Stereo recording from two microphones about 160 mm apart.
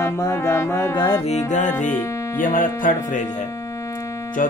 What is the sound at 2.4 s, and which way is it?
Mantra, 55° left (ahead or behind).